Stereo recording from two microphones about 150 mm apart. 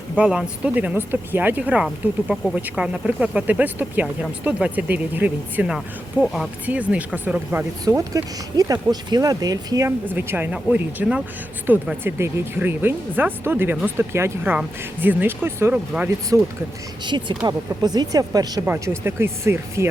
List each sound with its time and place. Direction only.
0.2 s speech: 5° right (ahead or behind)
7.9 s speech: 25° right (ahead or behind)
17.1 s speech: 30° right (ahead or behind)
18.6 s speech: 15° right (ahead or behind)